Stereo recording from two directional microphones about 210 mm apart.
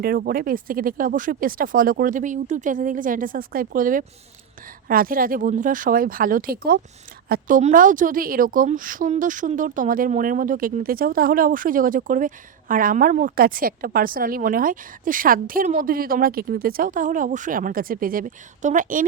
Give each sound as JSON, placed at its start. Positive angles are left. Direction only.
{"t": 0.0, "sound": "a woman's voice", "side_deg": -45}